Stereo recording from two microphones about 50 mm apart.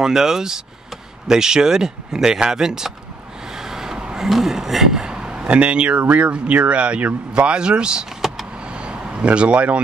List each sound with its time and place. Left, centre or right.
0.0 s speech: centre
3.5 s vehicle: centre
6.0 s speech: right
8.7 s a sound: right